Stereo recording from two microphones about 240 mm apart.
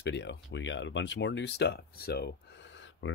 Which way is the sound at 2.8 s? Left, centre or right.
Left.